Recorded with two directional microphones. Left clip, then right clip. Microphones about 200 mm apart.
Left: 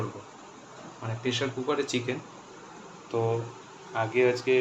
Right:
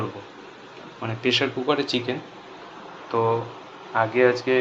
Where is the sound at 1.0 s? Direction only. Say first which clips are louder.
Right 8 dB; 20° right (ahead or behind).